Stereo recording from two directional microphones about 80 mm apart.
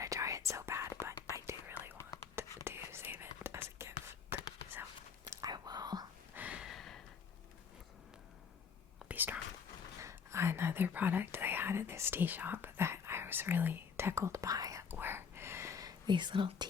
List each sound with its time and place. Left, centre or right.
0.0 s whispering: right
2.0 s whispering: left
2.3 s whispering: right
5.4 s whispering: right
6.3 s a sound: centre
6.7 s a sound: centre
9.0 s whispering: right
10.0 s whispering: right
14.8 s whispering: right
16.0 s speech: right